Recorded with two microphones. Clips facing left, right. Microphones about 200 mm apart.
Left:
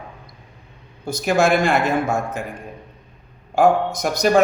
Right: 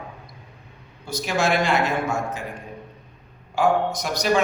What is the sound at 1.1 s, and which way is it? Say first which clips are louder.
A man's voice: left 5 dB; 50° left (ahead or behind).